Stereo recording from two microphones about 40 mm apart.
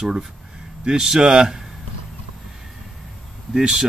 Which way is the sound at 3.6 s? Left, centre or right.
Centre.